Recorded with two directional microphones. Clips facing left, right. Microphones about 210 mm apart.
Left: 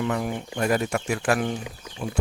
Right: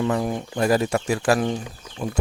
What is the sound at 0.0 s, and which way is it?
Speech, 30° right (ahead or behind).